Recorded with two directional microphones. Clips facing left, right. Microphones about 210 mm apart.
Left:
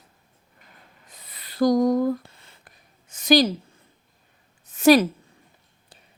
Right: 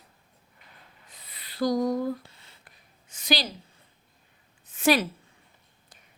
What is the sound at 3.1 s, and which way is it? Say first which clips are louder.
Speech: left 11 dB; 45° left (ahead or behind).